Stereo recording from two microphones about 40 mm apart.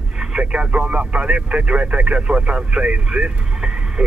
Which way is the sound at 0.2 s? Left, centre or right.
Right.